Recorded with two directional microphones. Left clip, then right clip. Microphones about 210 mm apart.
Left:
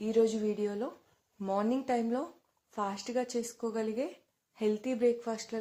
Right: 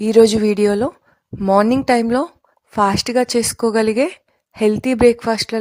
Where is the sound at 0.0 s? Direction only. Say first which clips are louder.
Right 17 dB; 50° right (ahead or behind).